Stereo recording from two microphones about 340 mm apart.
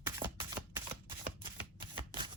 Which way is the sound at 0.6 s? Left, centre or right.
Centre.